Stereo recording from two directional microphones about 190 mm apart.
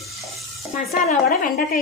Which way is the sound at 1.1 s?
45° left (ahead or behind).